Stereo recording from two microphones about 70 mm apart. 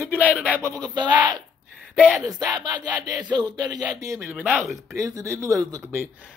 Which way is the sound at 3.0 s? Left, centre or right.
Right.